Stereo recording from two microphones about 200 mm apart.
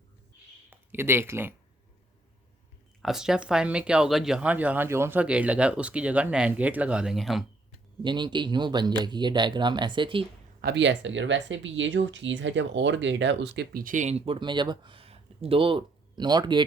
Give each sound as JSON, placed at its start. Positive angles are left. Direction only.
{"t": 0.7, "sound": "speech", "side_deg": -10}
{"t": 3.0, "sound": "speech", "side_deg": 0}
{"t": 8.0, "sound": "speech", "side_deg": -25}
{"t": 10.6, "sound": "speech", "side_deg": -60}